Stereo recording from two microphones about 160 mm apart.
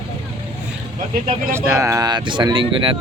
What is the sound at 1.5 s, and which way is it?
A man's voice, 20° right (ahead or behind).